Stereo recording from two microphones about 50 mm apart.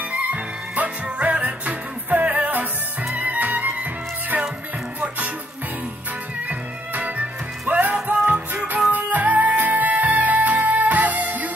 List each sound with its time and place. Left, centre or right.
0.1 s music: right
6.9 s music: right